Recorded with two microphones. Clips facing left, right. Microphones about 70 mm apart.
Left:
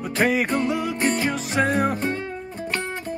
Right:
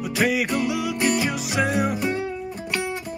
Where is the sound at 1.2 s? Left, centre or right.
Centre.